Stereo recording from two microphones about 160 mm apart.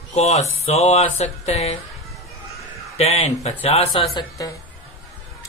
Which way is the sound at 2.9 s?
40° left (ahead or behind).